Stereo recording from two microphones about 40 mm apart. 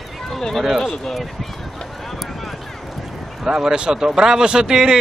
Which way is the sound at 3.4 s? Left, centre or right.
Centre.